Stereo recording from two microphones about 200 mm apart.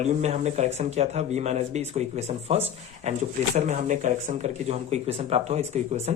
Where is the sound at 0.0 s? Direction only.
35° right (ahead or behind).